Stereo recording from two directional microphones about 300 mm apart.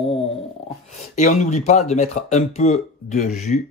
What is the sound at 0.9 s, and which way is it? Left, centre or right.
A man's voice, left.